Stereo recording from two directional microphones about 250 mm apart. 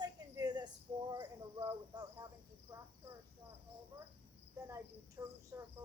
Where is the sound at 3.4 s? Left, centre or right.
Centre.